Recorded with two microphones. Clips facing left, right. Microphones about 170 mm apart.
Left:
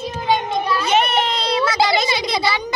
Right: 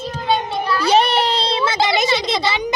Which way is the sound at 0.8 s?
35° right (ahead or behind).